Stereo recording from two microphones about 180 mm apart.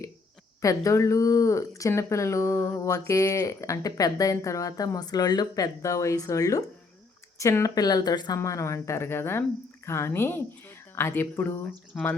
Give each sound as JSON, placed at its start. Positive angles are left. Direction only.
{"t": 0.6, "sound": "speech", "side_deg": 15}
{"t": 11.9, "sound": "speech", "side_deg": 0}